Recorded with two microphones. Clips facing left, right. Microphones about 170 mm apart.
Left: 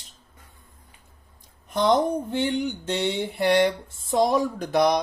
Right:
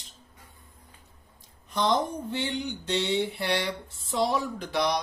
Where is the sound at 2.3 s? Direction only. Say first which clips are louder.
Left 6 dB; 50° left (ahead or behind).